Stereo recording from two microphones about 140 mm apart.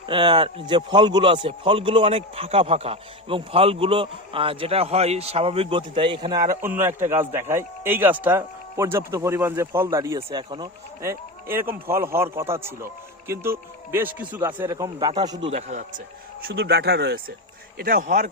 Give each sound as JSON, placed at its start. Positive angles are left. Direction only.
{"t": 0.0, "sound": "a man's voice", "side_deg": -35}
{"t": 6.6, "sound": "a man's voice", "side_deg": -15}
{"t": 11.0, "sound": "a man's voice", "side_deg": -15}
{"t": 14.9, "sound": "a man's voice", "side_deg": -35}
{"t": 15.4, "sound": "a man's voice", "side_deg": -50}
{"t": 17.7, "sound": "speech", "side_deg": -90}